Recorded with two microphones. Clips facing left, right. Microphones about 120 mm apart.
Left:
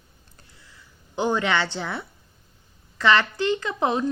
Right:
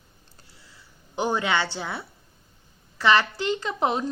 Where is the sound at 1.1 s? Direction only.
15° right (ahead or behind).